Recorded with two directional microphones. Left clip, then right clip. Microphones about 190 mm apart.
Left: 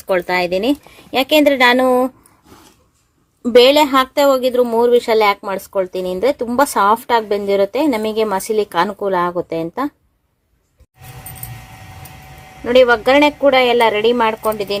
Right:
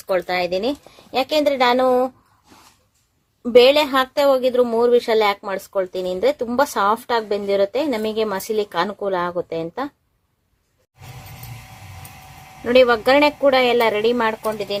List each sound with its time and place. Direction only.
0.1 s a woman's voice: 15° left (ahead or behind)
3.4 s a woman's voice: 10° left (ahead or behind)
12.6 s speech: 5° right (ahead or behind); by 14.8 s 15° left (ahead or behind)